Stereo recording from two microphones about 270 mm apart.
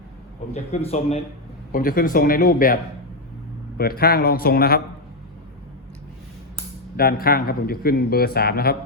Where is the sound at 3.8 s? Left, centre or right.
Left.